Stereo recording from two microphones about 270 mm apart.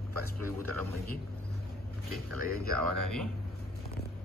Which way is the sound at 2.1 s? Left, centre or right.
Right.